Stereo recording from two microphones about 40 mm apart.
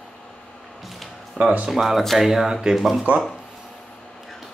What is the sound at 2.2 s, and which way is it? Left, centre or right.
Speech, centre.